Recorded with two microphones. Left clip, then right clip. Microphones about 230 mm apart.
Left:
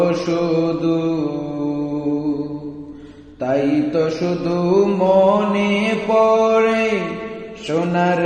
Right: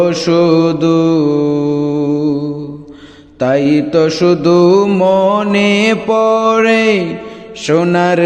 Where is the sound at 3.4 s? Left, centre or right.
Right.